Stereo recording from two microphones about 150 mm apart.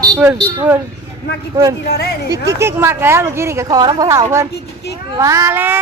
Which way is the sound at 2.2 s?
20° right (ahead or behind).